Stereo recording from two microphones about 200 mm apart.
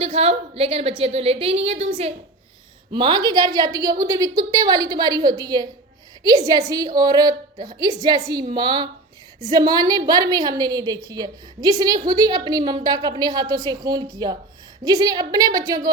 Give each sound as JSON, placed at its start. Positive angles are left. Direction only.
{"t": 0.0, "sound": "a woman's voice", "side_deg": -30}